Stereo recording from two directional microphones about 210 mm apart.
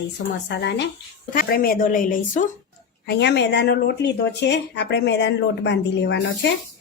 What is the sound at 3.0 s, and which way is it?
Speech, 50° left (ahead or behind).